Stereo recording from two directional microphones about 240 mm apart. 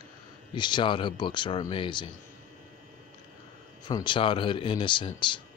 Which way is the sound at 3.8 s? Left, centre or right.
Centre.